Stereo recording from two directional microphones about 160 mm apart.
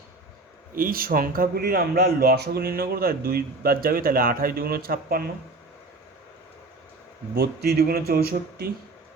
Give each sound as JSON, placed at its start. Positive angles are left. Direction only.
{"t": 0.8, "sound": "a man's voice", "side_deg": -65}
{"t": 7.3, "sound": "a man's voice", "side_deg": -75}